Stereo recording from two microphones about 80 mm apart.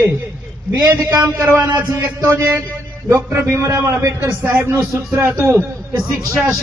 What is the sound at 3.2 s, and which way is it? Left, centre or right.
A man's voice, right.